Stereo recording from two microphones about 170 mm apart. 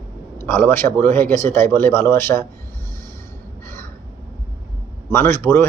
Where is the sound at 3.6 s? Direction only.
15° left (ahead or behind).